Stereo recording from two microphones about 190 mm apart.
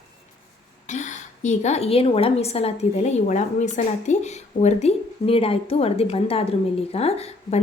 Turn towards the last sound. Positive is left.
turn(degrees=35)  # may be behind; listen again after turning